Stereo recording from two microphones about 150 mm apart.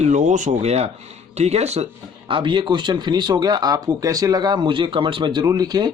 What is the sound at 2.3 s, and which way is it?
Speech, 35° right (ahead or behind).